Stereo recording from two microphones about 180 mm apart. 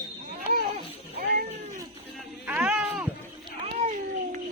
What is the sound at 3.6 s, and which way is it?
Cat, 40° right (ahead or behind).